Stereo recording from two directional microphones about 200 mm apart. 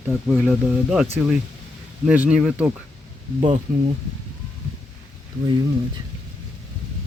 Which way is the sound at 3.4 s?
30° right (ahead or behind).